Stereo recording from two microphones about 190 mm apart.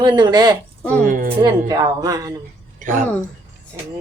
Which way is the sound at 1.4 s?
20° right (ahead or behind).